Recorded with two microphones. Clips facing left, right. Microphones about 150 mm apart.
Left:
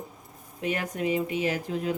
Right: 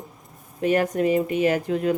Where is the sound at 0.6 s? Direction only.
45° right (ahead or behind).